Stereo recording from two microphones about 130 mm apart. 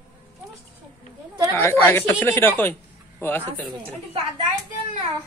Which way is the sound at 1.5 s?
20° left (ahead or behind).